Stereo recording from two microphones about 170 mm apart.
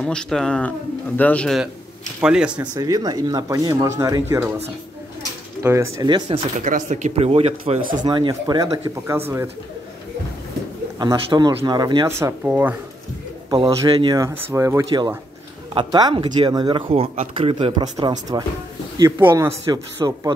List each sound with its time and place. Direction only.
0.0 s speech: 5° left (ahead or behind)
2.6 s speech: 20° right (ahead or behind)
5.6 s speech: 15° right (ahead or behind)
6.0 s speech: 25° right (ahead or behind)
6.6 s speech: 45° right (ahead or behind)
8.0 s speech: 25° right (ahead or behind)
11.0 s speech: 25° right (ahead or behind)
12.1 s speech: 15° right (ahead or behind)
13.5 s speech: 30° right (ahead or behind)
16.9 s speech: 35° right (ahead or behind)